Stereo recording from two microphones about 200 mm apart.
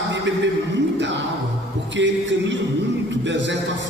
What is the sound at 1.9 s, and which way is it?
Music, 65° right (ahead or behind).